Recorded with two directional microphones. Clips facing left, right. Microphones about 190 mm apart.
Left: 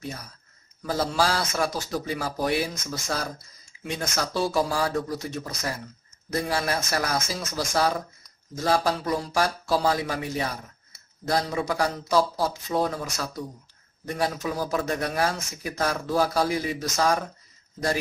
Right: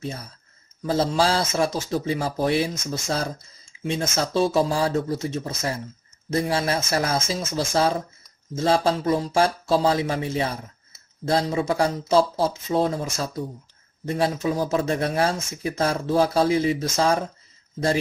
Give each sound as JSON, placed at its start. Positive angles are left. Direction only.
{"t": 0.8, "sound": "a man's voice", "side_deg": -25}